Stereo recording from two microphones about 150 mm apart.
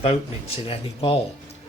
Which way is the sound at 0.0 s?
40° left (ahead or behind).